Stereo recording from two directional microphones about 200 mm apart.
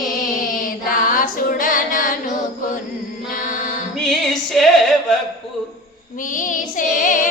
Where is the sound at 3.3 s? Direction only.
40° left (ahead or behind).